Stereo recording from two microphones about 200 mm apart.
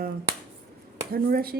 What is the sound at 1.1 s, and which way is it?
Speech, 50° right (ahead or behind).